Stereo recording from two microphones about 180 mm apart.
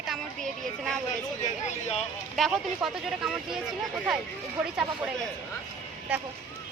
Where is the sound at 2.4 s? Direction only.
Centre (ahead or behind).